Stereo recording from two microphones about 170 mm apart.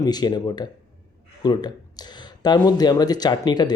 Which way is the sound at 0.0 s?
25° left (ahead or behind).